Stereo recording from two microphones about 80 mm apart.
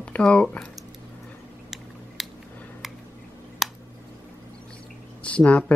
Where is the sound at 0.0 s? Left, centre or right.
Centre.